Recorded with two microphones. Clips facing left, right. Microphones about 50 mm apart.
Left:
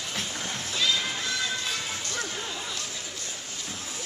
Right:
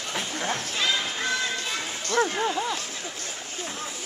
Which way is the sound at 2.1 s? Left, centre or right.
Right.